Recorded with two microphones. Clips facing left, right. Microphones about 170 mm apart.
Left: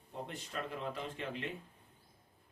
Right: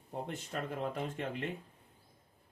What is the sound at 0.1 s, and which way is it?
Speech, 50° right (ahead or behind).